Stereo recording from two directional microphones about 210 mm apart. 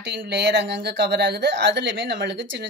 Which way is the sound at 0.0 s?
50° right (ahead or behind).